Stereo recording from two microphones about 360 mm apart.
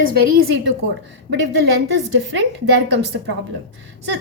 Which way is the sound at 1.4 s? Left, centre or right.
Right.